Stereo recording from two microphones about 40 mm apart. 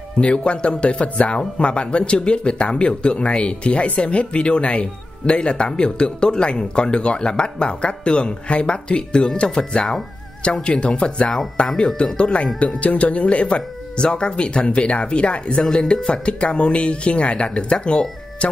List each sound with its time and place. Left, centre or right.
0.2 s speech: left
15.6 s speech: centre
15.9 s speech: left